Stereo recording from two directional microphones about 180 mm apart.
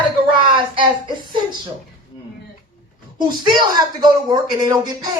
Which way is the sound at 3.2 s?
25° right (ahead or behind).